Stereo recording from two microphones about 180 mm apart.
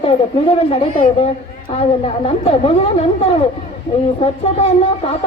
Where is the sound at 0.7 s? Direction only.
30° left (ahead or behind).